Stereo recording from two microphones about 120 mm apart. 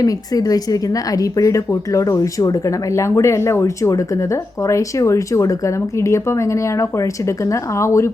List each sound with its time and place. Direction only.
0.0 s speech: 30° left (ahead or behind)